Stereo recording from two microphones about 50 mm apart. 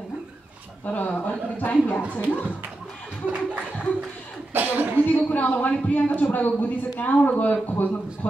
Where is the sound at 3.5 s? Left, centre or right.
Right.